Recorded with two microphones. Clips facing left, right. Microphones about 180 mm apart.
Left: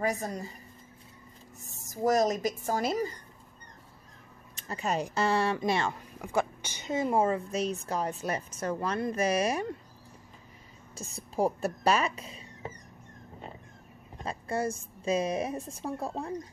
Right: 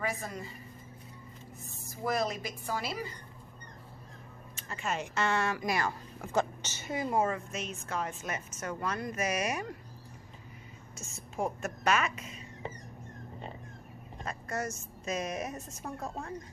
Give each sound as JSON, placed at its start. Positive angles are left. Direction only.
{"t": 0.0, "sound": "a woman's voice", "side_deg": 40}
{"t": 1.9, "sound": "a woman's voice", "side_deg": 40}
{"t": 4.6, "sound": "a woman's voice", "side_deg": 35}
{"t": 6.2, "sound": "a woman's voice", "side_deg": 10}
{"t": 11.0, "sound": "a woman's voice", "side_deg": 35}
{"t": 14.2, "sound": "a woman's voice", "side_deg": 30}